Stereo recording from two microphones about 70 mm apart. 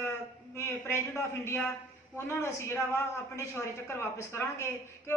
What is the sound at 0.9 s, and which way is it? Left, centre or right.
A man's voice, left.